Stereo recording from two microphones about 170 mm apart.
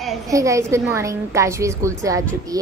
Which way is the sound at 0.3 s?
20° right (ahead or behind).